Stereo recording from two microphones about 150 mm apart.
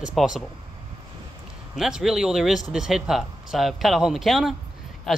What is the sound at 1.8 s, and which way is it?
Speech, 5° right (ahead or behind).